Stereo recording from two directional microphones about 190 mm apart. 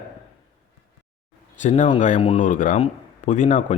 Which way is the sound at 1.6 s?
40° left (ahead or behind).